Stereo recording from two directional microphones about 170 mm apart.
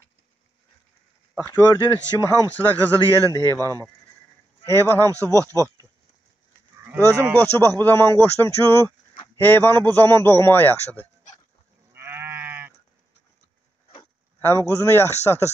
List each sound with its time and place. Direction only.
1.5 s a man's voice: 20° left (ahead or behind)
2.1 s speech: 20° right (ahead or behind)
2.5 s a man's voice: 10° left (ahead or behind)
5.2 s speech: 20° right (ahead or behind)
6.9 s speech: 15° right (ahead or behind)
7.3 s a man's voice: 10° left (ahead or behind)
11.9 s livestock: 15° right (ahead or behind)
14.4 s a man's voice: 15° left (ahead or behind)